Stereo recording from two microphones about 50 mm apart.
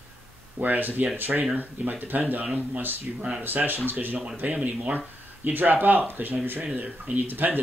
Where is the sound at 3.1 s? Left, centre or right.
Centre.